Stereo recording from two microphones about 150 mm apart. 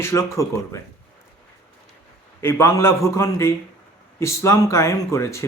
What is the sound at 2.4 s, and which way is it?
A man's voice, 15° left (ahead or behind).